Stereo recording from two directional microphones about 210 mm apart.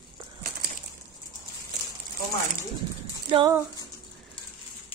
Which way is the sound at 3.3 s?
15° right (ahead or behind).